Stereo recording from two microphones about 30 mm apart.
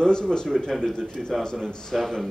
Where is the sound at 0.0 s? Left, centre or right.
Left.